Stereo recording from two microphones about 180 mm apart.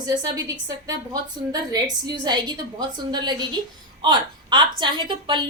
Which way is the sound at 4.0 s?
25° right (ahead or behind).